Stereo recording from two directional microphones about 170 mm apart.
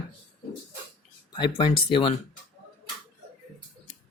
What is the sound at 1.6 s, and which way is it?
Speech, 30° left (ahead or behind).